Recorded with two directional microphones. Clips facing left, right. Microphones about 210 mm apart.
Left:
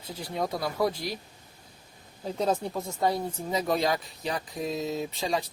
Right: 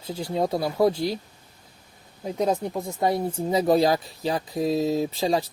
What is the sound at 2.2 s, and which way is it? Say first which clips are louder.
Speech: right 3 dB; 15° right (ahead or behind).